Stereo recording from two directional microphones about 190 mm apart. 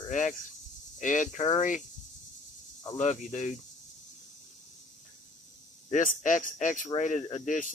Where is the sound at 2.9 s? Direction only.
40° left (ahead or behind).